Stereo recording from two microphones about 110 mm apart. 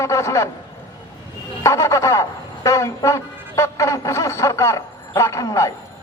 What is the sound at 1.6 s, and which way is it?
A man's voice, 25° left (ahead or behind).